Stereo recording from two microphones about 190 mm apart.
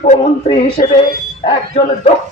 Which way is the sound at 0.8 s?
40° left (ahead or behind).